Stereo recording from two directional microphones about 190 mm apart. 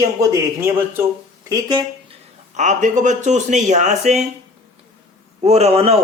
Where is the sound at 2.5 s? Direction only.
40° right (ahead or behind).